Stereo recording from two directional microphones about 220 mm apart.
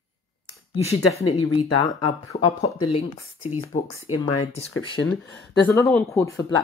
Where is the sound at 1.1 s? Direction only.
25° left (ahead or behind).